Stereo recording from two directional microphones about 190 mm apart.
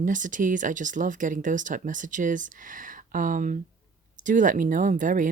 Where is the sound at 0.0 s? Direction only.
45° right (ahead or behind).